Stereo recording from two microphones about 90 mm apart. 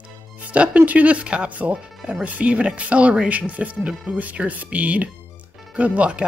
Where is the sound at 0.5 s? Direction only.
15° right (ahead or behind).